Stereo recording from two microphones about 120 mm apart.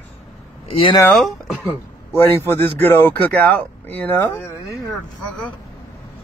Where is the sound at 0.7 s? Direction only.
50° left (ahead or behind).